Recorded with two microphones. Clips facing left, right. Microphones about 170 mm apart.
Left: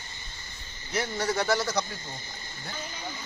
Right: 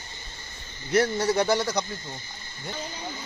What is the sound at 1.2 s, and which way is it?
Speech, 20° right (ahead or behind).